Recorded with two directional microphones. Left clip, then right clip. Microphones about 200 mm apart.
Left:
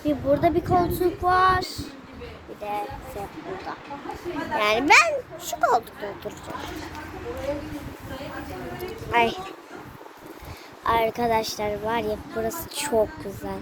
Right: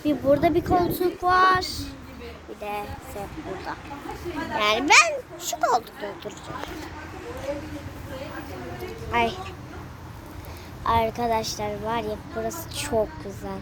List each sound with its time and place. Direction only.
0.0 s speech: 30° right (ahead or behind)
4.5 s speech: centre (ahead or behind)
7.5 s speech: 45° left (ahead or behind)
9.1 s speech: centre (ahead or behind)
10.8 s speech: 5° left (ahead or behind)